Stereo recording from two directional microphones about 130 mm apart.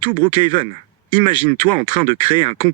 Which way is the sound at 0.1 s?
40° left (ahead or behind).